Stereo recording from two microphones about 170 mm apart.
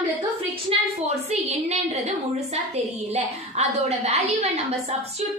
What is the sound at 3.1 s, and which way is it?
A woman's voice, 40° right (ahead or behind).